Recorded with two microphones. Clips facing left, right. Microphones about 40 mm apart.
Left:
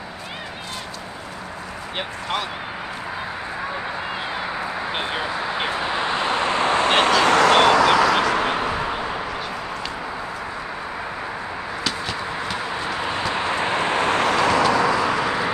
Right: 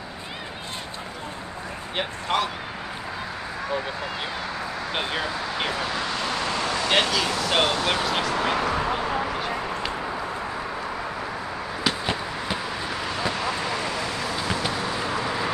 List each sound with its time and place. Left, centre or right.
4.3 s a sound: left
5.0 s vehicle: centre; by 8.5 s left
8.5 s a sound: left
8.7 s vehicle: centre
12.7 s vehicle: centre; by 15.1 s left
15.2 s vehicle: left